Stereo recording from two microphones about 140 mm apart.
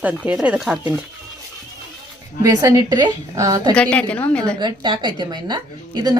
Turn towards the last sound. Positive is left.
turn(degrees=-30)  # may be behind; listen again after turning